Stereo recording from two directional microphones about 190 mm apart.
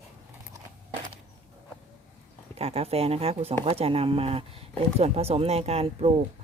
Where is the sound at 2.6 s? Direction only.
30° right (ahead or behind).